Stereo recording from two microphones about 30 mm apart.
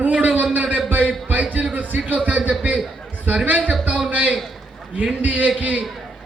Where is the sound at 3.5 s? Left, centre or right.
Right.